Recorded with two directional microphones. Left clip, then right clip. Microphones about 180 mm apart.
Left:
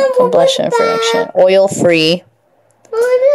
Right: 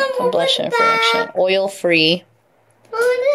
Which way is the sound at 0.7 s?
70° left (ahead or behind).